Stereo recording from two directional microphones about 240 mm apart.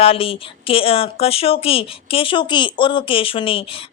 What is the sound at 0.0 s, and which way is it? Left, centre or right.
Speech, left.